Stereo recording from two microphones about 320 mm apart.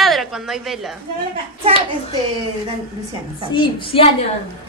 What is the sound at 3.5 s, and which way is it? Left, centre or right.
Speech, centre.